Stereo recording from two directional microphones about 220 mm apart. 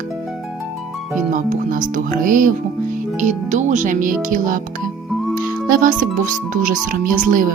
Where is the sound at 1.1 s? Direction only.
35° right (ahead or behind).